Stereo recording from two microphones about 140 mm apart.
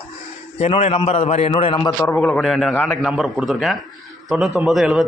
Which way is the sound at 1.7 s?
25° left (ahead or behind).